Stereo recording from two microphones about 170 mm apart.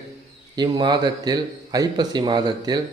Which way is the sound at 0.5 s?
25° right (ahead or behind).